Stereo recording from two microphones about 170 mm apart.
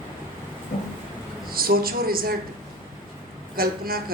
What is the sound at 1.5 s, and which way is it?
Speech, 60° right (ahead or behind).